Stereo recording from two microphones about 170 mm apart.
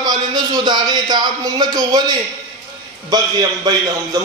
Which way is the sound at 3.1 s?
25° right (ahead or behind).